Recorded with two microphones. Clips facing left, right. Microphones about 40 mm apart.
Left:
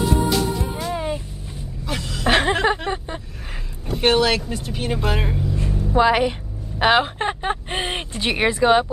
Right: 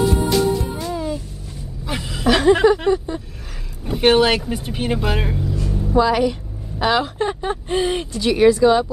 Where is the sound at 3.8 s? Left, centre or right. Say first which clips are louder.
Right 3 dB; centre.